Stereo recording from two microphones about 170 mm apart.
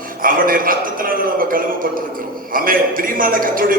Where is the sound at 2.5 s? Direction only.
55° right (ahead or behind).